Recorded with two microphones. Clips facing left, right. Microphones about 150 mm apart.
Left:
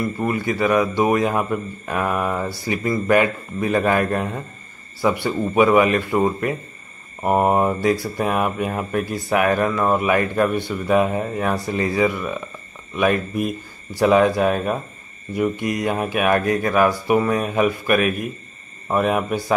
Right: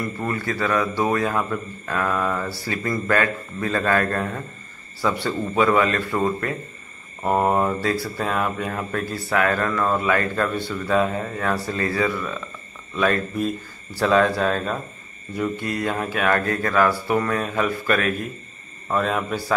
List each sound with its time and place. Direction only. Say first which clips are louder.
0.2 s speech: left 4 dB; 15° left (ahead or behind)